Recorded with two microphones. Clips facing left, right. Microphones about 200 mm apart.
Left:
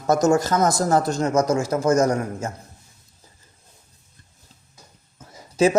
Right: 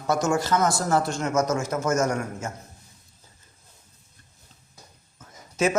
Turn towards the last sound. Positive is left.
turn(degrees=35)  # may be behind; listen again after turning